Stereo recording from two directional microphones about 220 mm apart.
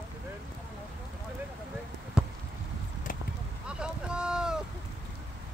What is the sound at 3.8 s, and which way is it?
Boat, 5° right (ahead or behind).